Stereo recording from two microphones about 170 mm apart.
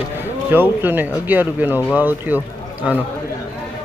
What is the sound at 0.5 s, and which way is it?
Speech, 10° right (ahead or behind).